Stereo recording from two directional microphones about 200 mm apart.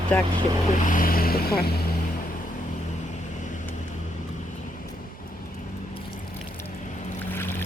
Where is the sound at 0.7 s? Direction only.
40° left (ahead or behind).